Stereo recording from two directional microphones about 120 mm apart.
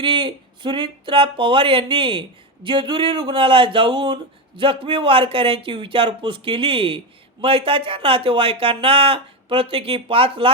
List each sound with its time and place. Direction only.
0.0 s speech: 45° right (ahead or behind)